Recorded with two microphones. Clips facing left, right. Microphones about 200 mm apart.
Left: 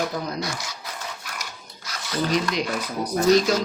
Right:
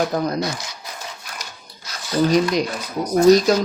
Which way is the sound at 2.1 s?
40° right (ahead or behind).